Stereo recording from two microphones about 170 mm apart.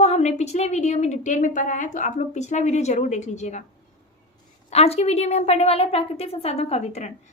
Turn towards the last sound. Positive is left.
turn(degrees=40)  # may be behind; listen again after turning